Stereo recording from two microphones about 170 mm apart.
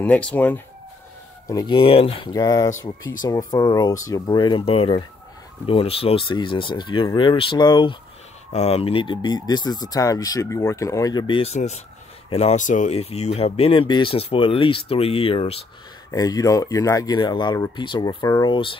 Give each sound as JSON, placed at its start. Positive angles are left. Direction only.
{"t": 0.0, "sound": "speech", "side_deg": 10}
{"t": 1.5, "sound": "speech", "side_deg": 25}
{"t": 8.5, "sound": "speech", "side_deg": 40}
{"t": 16.1, "sound": "speech", "side_deg": 20}